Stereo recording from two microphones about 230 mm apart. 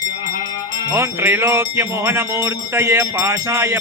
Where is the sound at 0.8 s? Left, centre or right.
Centre.